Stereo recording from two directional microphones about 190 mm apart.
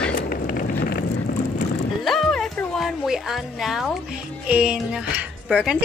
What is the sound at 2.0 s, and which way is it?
Music, centre (ahead or behind).